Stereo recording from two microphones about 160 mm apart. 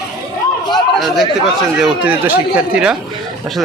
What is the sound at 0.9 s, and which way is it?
Speech, centre (ahead or behind).